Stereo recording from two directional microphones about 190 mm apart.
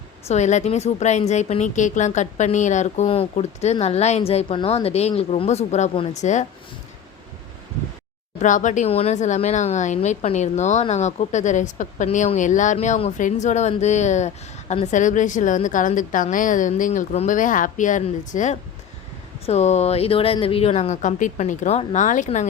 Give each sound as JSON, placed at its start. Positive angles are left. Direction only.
{"t": 0.3, "sound": "speech", "side_deg": 35}
{"t": 8.4, "sound": "speech", "side_deg": 40}